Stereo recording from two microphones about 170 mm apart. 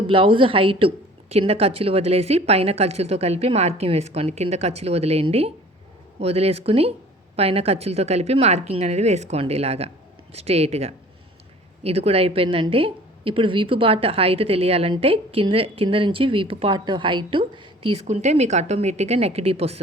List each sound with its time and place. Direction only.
0.1 s a woman's voice: 30° right (ahead or behind)